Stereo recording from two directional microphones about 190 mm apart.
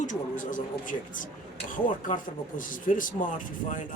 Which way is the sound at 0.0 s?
40° left (ahead or behind).